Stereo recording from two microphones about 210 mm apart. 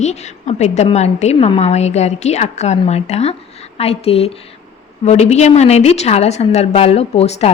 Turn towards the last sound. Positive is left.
turn(degrees=30)  # may be behind; listen again after turning